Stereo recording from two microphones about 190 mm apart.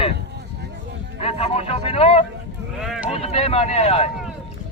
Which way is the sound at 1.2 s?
35° left (ahead or behind).